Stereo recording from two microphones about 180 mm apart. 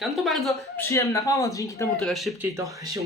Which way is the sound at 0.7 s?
15° left (ahead or behind).